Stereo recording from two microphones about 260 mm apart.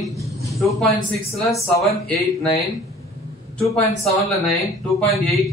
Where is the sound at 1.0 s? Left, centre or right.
Centre.